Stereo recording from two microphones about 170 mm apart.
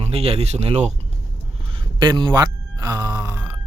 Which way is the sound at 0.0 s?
35° right (ahead or behind).